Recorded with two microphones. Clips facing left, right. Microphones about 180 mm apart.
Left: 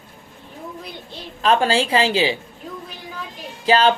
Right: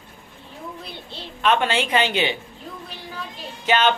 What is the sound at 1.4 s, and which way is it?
Speech, 35° left (ahead or behind).